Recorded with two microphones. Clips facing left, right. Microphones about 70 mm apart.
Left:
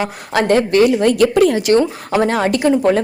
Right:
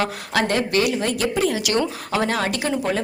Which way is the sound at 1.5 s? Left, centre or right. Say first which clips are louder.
Left 8 dB; left.